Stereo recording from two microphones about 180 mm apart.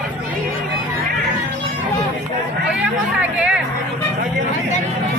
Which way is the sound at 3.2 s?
5° right (ahead or behind).